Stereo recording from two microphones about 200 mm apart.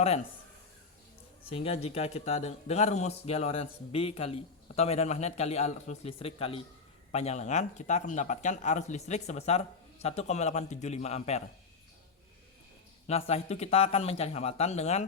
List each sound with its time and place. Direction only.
1.5 s speech: 30° left (ahead or behind)
13.1 s speech: 30° left (ahead or behind)